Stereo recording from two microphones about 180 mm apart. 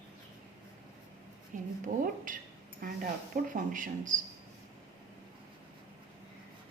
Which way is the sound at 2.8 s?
50° right (ahead or behind).